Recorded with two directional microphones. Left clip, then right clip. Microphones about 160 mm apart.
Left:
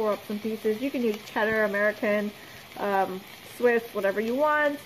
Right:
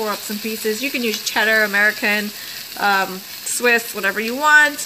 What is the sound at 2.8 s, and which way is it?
Speech, 80° right.